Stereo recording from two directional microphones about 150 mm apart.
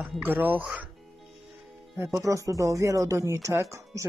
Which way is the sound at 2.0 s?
20° right (ahead or behind).